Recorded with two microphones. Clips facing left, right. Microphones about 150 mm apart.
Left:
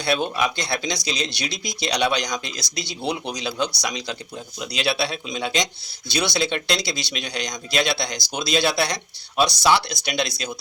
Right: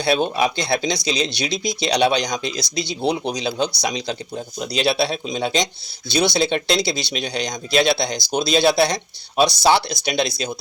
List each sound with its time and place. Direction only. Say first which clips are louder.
0.0 s speech: right 4 dB; 30° right (ahead or behind)